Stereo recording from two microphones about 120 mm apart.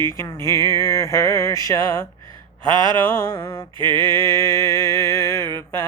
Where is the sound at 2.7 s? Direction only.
40° right (ahead or behind).